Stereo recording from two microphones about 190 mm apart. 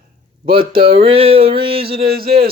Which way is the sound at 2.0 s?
55° right (ahead or behind).